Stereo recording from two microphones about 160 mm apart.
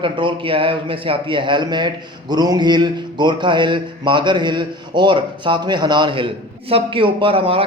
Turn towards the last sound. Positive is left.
turn(degrees=-35)  # may be behind; listen again after turning